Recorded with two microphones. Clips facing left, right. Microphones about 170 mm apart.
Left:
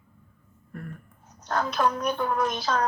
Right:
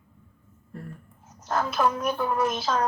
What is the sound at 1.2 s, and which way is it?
A woman's voice, 5° right (ahead or behind).